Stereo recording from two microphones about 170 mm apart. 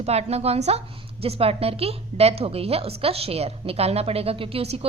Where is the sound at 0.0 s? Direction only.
40° right (ahead or behind).